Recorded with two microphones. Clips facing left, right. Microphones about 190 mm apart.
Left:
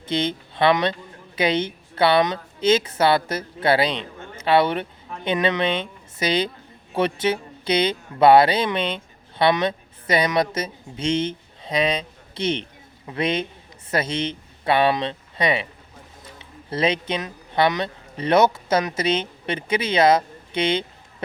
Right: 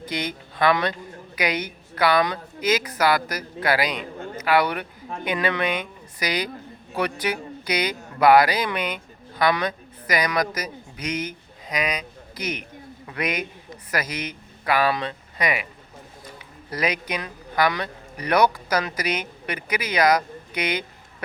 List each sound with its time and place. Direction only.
0.0 s a woman's voice: 25° left (ahead or behind)
16.6 s a man's voice: 25° left (ahead or behind)